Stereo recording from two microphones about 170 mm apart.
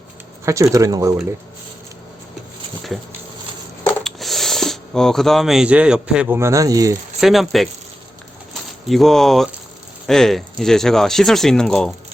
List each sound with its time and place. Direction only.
0.4 s speech: 20° right (ahead or behind)
4.0 s speech: centre (ahead or behind); by 6.9 s 20° right (ahead or behind)
7.2 s speech: centre (ahead or behind)
8.9 s speech: centre (ahead or behind)